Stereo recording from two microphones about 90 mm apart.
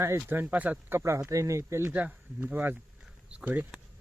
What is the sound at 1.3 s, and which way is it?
Speech, 35° right (ahead or behind).